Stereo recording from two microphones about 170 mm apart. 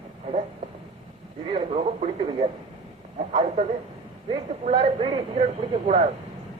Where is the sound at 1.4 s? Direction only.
35° right (ahead or behind).